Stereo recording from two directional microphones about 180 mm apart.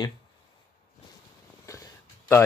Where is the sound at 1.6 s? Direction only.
15° left (ahead or behind).